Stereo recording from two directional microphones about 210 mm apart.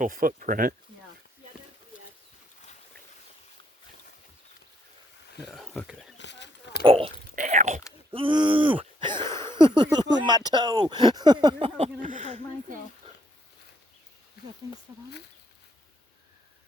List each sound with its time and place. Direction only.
0.0 s speech: 40° right (ahead or behind)
5.5 s wild animals: centre (ahead or behind)
6.1 s a sound: 55° left (ahead or behind)
6.8 s whispering: 25° right (ahead or behind)
8.1 s speech: 25° right (ahead or behind)
8.5 s a sound: 10° right (ahead or behind)
8.8 s a sound: 20° right (ahead or behind)
9.5 s speech: 20° right (ahead or behind)
11.9 s speech: 40° right (ahead or behind)